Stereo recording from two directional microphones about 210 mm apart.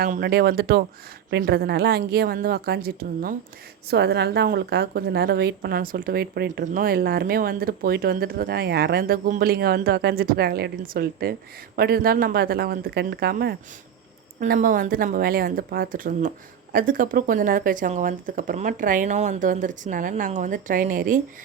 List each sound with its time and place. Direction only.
0.0 s a woman's voice: 50° right (ahead or behind)